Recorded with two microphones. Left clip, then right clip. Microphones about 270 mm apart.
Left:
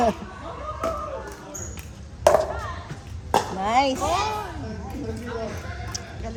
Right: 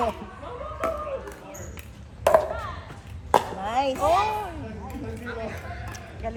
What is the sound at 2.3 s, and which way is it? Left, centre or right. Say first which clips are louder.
Chop: left 2 dB; centre.